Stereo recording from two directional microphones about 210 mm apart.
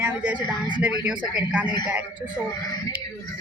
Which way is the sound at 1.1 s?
5° right (ahead or behind).